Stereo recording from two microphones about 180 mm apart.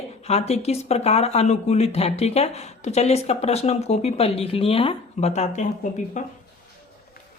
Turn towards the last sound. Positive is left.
turn(degrees=40)  # may be behind; listen again after turning